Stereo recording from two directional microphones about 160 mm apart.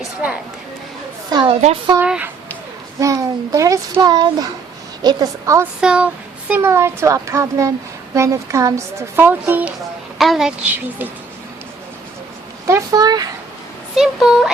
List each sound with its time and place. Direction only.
1.3 s a child's voice: 25° right (ahead or behind)
2.0 s a woman's voice: 10° right (ahead or behind)
3.0 s a child's voice: 20° right (ahead or behind)
5.8 s a woman's voice: 5° right (ahead or behind)
12.6 s a child's voice: 20° right (ahead or behind)
13.9 s speech: centre (ahead or behind)